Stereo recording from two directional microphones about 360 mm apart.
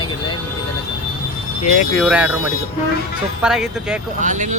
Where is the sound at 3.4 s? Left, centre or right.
Centre.